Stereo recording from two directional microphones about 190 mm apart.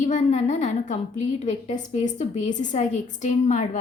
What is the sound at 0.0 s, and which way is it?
A woman's voice, 40° left (ahead or behind).